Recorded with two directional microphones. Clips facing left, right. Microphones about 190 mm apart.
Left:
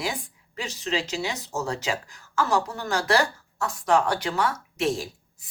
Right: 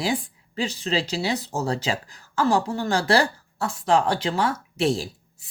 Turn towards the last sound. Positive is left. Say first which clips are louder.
# right 3 dB
turn(degrees=-30)  # may be behind; listen again after turning